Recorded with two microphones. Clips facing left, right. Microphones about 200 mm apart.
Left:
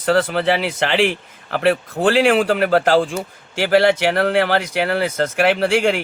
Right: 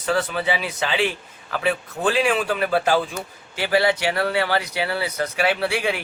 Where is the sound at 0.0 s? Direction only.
75° left (ahead or behind).